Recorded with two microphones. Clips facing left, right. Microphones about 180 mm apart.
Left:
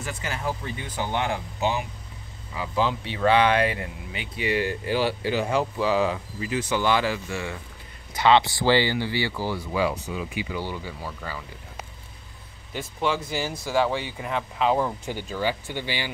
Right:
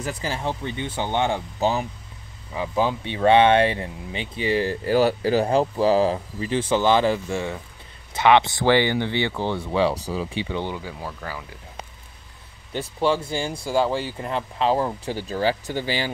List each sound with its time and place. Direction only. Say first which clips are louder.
0.0 s speech: right 3 dB; 35° right (ahead or behind)
2.5 s speech: right 2 dB; 20° right (ahead or behind)
10.8 s speech: right 2 dB; 10° right (ahead or behind)
12.7 s speech: right 4 dB; 30° right (ahead or behind)
13.5 s speech: right 2 dB; 10° right (ahead or behind)
14.1 s speech: right 2 dB; 5° left (ahead or behind)
15.0 s speech: right 4 dB; 40° right (ahead or behind)